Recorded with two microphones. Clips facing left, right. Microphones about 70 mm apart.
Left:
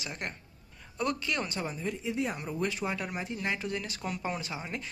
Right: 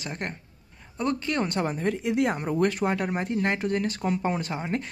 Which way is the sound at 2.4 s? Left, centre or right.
Right.